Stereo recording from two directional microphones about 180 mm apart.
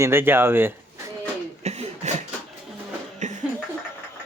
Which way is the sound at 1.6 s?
40° right (ahead or behind).